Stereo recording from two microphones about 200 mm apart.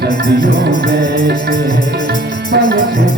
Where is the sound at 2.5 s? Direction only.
50° right (ahead or behind).